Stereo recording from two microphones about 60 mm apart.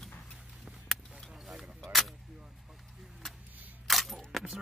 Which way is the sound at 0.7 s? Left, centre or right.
Centre.